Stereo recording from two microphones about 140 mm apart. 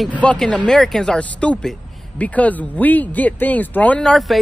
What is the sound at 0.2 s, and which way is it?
Speech, 5° left (ahead or behind).